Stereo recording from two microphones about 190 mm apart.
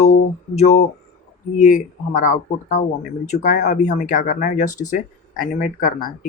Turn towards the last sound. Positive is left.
turn(degrees=45)  # may be behind; listen again after turning